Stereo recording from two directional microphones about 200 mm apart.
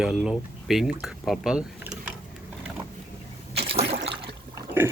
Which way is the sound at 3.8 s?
55° right (ahead or behind).